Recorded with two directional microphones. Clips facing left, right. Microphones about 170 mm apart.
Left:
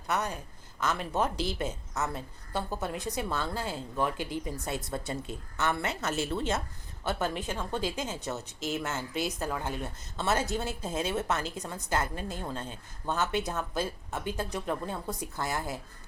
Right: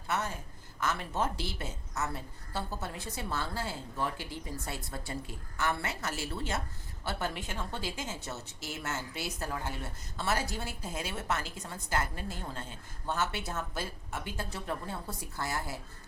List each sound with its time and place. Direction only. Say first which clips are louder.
0.1 s a woman's voice: left 3 dB; 15° left (ahead or behind)